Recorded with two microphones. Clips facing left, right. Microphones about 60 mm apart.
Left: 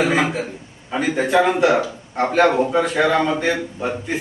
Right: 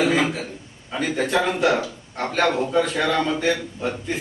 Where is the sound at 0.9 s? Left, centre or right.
Centre.